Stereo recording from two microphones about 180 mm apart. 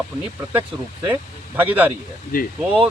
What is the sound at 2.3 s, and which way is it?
Speech, 55° left (ahead or behind).